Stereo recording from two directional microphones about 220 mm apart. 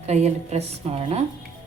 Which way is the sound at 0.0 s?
30° right (ahead or behind).